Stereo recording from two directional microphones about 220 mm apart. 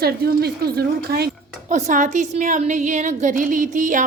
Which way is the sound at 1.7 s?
35° right (ahead or behind).